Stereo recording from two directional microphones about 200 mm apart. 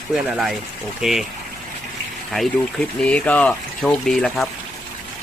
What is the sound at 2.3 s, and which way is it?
Speech, centre (ahead or behind).